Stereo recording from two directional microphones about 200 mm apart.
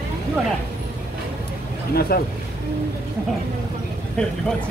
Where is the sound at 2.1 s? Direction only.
50° left (ahead or behind).